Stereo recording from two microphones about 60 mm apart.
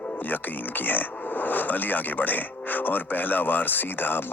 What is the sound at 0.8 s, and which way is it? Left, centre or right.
Speech, left.